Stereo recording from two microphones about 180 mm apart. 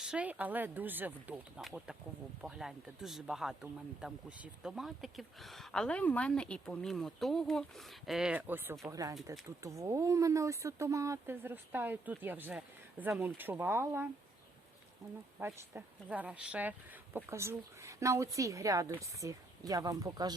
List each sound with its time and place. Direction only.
0.0 s speech: 5° right (ahead or behind)
15.4 s speech: 10° right (ahead or behind)